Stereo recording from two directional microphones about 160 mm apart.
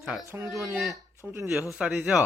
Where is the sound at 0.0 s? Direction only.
Centre (ahead or behind).